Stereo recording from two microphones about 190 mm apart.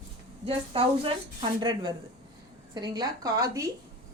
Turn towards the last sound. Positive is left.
turn(degrees=-15)  # may be behind; listen again after turning